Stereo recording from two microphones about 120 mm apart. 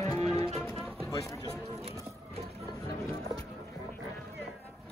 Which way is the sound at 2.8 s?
25° left (ahead or behind).